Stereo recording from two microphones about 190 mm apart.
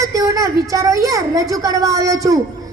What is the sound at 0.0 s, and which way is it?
A woman's voice, 15° right (ahead or behind).